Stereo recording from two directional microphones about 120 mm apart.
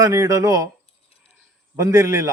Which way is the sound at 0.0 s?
30° right (ahead or behind).